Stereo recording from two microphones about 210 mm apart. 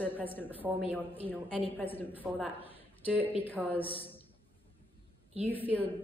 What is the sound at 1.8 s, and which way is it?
A woman's voice, 10° left (ahead or behind).